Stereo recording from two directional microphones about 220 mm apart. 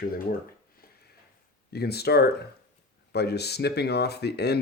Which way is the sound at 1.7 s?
45° left (ahead or behind).